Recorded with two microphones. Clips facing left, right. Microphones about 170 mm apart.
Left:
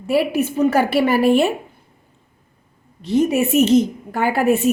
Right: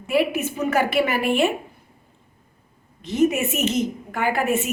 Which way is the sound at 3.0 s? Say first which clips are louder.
Left 3 dB; 35° left (ahead or behind).